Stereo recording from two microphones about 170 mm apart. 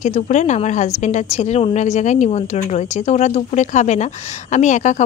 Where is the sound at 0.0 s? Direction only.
45° left (ahead or behind).